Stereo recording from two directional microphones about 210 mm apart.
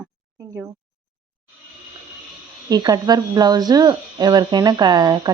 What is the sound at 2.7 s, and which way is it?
Speech, 20° right (ahead or behind).